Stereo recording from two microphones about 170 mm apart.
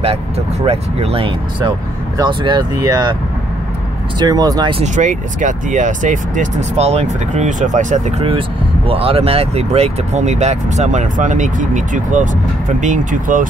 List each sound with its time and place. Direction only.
0.0 s speech: 35° right (ahead or behind)
4.2 s speech: 20° right (ahead or behind)
4.8 s speech: 45° right (ahead or behind)